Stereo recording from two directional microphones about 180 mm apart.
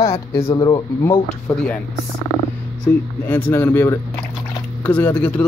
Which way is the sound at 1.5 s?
5° left (ahead or behind).